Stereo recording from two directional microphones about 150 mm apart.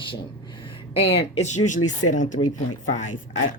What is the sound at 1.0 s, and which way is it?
Speech, 45° left (ahead or behind).